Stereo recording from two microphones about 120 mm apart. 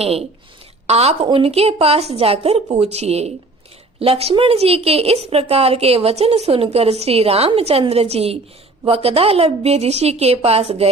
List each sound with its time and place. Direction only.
0.0 s a woman's voice: 55° right (ahead or behind)